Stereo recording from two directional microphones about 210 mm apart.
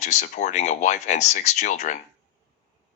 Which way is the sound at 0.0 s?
35° left (ahead or behind).